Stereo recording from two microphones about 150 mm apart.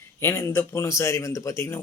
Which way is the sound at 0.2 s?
15° left (ahead or behind).